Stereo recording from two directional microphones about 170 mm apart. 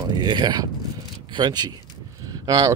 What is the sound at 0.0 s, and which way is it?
Speech, 25° right (ahead or behind).